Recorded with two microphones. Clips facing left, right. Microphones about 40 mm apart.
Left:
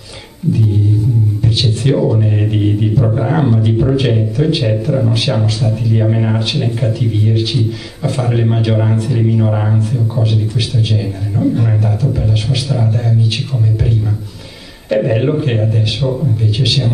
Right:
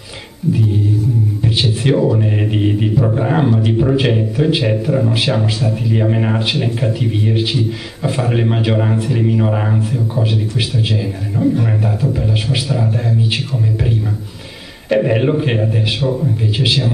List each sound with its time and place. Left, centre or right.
1.4 s a sound: centre
2.0 s speech: centre
15.0 s speech: centre
16.0 s a man's voice: centre
16.5 s speech: centre